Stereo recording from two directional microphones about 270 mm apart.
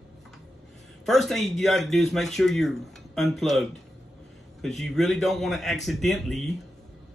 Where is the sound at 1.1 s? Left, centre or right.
Centre.